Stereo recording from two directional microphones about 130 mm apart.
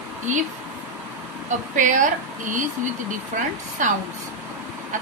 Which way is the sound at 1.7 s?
75° right (ahead or behind).